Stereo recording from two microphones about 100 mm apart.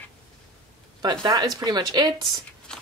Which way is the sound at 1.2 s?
40° right (ahead or behind).